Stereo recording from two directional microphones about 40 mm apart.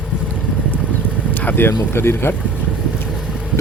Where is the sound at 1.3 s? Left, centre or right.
Left.